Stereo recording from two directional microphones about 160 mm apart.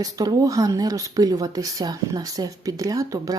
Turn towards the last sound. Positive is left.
turn(degrees=-20)  # may be behind; listen again after turning